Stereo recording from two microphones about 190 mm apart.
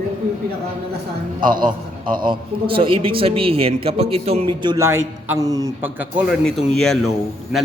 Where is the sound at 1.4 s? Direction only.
45° right (ahead or behind).